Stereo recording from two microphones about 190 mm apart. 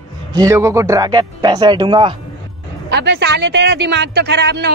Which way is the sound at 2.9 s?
60° right (ahead or behind).